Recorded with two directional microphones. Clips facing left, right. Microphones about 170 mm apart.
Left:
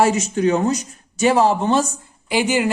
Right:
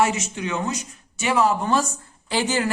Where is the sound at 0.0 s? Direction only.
35° left (ahead or behind).